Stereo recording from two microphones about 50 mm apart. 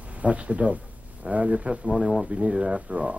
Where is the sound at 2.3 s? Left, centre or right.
Right.